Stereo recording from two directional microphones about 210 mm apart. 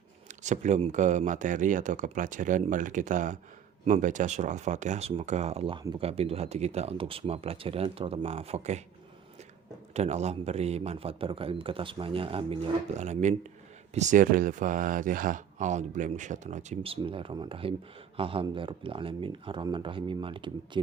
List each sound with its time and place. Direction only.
0.3 s speech: 35° right (ahead or behind)
9.9 s speech: 30° right (ahead or behind)